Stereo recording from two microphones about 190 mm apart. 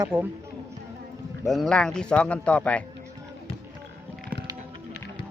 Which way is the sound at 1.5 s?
Centre (ahead or behind).